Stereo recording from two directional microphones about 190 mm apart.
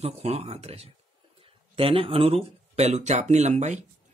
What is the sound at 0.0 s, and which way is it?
Speech, 35° right (ahead or behind).